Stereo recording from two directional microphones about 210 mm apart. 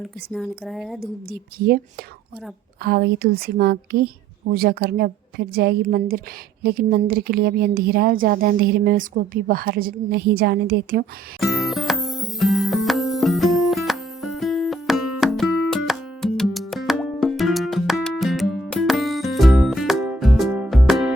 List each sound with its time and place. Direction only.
0.3 s speech: centre (ahead or behind)
1.3 s a woman's voice: 45° right (ahead or behind)
2.8 s a woman's voice: 50° right (ahead or behind)
11.3 s music: centre (ahead or behind)